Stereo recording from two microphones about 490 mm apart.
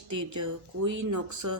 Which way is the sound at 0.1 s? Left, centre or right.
Right.